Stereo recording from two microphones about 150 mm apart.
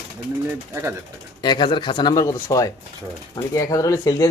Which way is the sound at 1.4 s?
30° left (ahead or behind).